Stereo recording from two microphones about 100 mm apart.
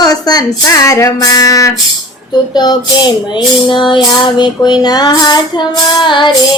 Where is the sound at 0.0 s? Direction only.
40° left (ahead or behind).